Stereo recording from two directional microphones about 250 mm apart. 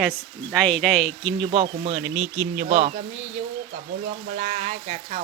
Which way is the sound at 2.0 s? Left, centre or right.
Centre.